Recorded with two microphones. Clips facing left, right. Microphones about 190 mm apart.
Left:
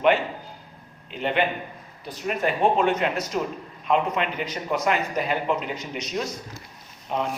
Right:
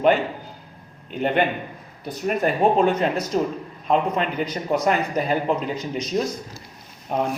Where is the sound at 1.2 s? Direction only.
45° right (ahead or behind).